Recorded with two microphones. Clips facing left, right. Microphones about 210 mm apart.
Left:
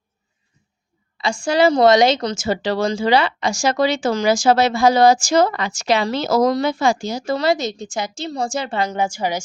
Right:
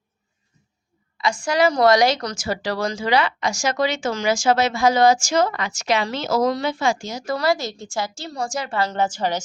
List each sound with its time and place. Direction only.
1.2 s a woman's voice: 30° left (ahead or behind)
8.8 s a woman's voice: 10° left (ahead or behind)